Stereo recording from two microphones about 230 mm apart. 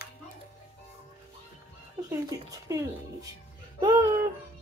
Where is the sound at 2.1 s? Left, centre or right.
Centre.